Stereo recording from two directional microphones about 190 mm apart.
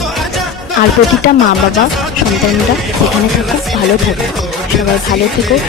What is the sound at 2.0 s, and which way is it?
Speech, centre (ahead or behind).